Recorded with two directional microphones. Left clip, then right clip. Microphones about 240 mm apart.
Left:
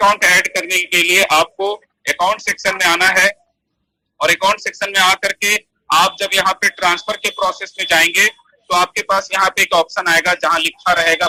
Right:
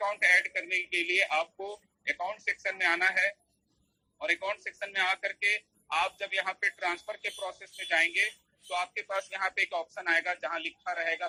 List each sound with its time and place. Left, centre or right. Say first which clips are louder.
0.0 s speech: left 14 dB; left